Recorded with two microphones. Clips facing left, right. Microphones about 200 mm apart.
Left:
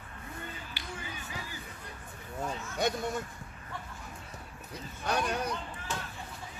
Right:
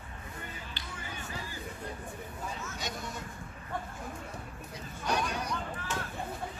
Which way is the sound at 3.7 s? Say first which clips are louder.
Right 6 dB; 50° right (ahead or behind).